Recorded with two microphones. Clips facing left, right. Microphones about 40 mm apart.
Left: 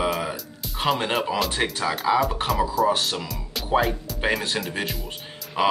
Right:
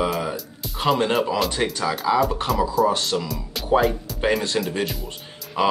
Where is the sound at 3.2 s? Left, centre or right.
Centre.